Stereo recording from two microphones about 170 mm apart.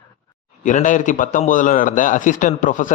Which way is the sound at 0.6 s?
50° left (ahead or behind).